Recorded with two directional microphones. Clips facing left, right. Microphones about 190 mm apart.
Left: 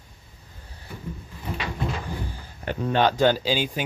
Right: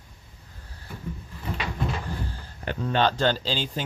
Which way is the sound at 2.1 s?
15° left (ahead or behind).